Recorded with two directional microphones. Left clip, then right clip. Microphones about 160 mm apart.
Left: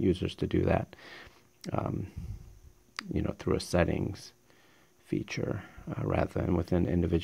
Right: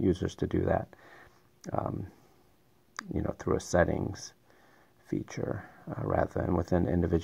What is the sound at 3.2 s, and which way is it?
Speech, 30° left (ahead or behind).